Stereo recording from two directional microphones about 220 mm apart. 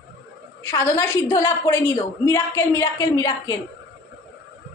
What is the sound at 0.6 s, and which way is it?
A woman's voice, 10° left (ahead or behind).